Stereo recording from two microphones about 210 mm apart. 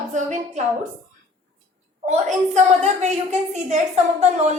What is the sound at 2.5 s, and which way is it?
A woman's voice, 35° right (ahead or behind).